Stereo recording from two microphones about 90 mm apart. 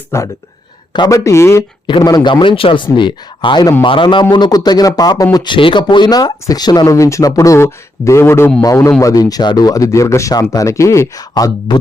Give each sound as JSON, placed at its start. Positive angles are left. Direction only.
{"t": 0.1, "sound": "a man's voice", "side_deg": 30}
{"t": 1.9, "sound": "speech", "side_deg": 50}
{"t": 2.3, "sound": "a man's voice", "side_deg": 70}
{"t": 5.5, "sound": "a man's voice", "side_deg": 70}
{"t": 6.9, "sound": "a man's voice", "side_deg": 35}
{"t": 11.2, "sound": "a man's voice", "side_deg": 45}